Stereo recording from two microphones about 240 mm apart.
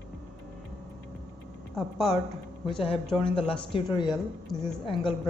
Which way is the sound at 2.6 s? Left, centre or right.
Left.